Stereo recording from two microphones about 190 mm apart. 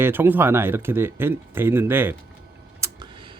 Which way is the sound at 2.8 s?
25° right (ahead or behind).